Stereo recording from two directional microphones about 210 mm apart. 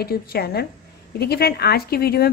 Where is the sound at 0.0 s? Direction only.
45° left (ahead or behind).